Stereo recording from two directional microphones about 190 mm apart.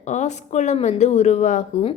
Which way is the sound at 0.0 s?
40° left (ahead or behind).